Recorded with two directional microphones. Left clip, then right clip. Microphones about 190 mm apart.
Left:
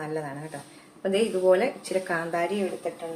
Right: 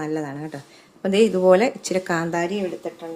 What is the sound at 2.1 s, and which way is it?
Speech, 65° right (ahead or behind).